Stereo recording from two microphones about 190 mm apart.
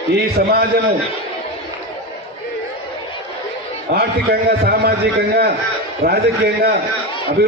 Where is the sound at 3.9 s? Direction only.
55° right (ahead or behind).